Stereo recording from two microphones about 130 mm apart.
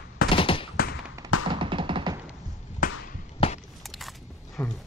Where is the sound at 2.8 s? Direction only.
90° left.